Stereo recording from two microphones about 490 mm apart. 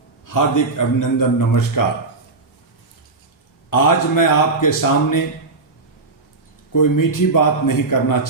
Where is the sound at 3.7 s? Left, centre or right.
Left.